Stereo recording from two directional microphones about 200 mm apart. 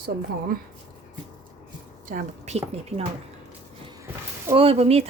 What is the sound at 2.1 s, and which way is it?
Speech, 35° right (ahead or behind).